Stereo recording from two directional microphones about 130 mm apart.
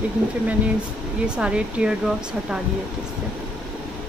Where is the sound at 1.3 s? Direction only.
5° right (ahead or behind).